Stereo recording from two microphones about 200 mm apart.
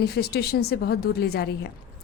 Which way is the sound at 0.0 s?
55° left (ahead or behind).